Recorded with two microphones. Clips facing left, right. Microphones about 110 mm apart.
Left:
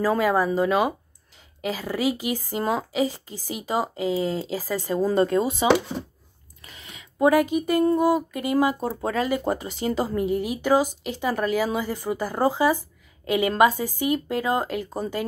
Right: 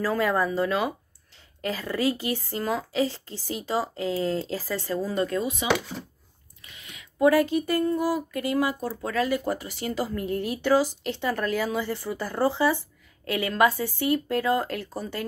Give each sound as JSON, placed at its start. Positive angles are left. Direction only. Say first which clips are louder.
{"t": 0.2, "sound": "speech", "louder": "left 3 dB", "side_deg": 10}
{"t": 2.6, "sound": "a woman's voice", "louder": "left 4 dB", "side_deg": 25}
{"t": 3.0, "sound": "speech", "louder": "left 1 dB", "side_deg": 10}
{"t": 5.0, "sound": "speech", "louder": "left 8 dB", "side_deg": 30}
{"t": 6.6, "sound": "a sound", "louder": "left 3 dB", "side_deg": 35}
{"t": 8.0, "sound": "speech", "louder": "left 5 dB", "side_deg": 20}